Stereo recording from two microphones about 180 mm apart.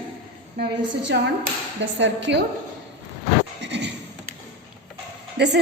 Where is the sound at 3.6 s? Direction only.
75° right (ahead or behind).